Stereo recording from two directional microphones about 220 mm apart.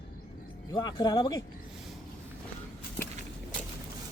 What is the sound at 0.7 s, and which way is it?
Speech, 20° left (ahead or behind).